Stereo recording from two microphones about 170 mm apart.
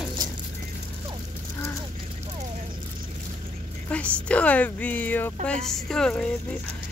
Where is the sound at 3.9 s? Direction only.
5° left (ahead or behind).